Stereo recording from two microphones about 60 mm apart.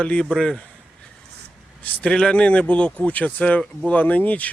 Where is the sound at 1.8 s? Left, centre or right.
Left.